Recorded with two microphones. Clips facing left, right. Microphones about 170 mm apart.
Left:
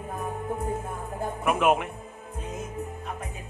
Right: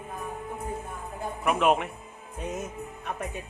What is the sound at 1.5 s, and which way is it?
Speech, 5° left (ahead or behind).